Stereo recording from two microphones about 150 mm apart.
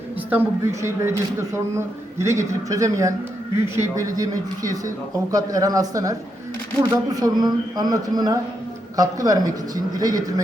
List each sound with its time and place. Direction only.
0.3 s speech: 15° right (ahead or behind)